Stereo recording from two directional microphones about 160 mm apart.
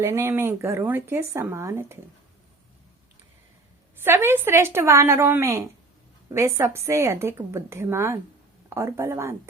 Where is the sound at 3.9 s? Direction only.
15° right (ahead or behind).